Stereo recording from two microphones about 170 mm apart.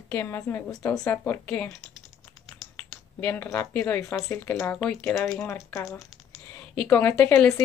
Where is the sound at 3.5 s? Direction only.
10° left (ahead or behind).